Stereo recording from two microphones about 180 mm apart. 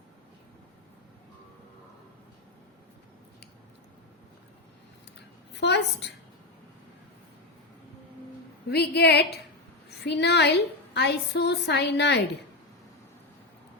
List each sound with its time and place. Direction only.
5.5 s a woman's voice: 70° left (ahead or behind)
8.7 s a woman's voice: 65° left (ahead or behind)